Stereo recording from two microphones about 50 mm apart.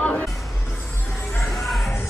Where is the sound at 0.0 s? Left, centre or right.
Left.